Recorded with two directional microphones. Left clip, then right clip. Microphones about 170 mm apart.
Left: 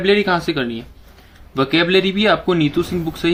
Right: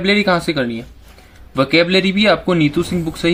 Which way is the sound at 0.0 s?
50° right (ahead or behind).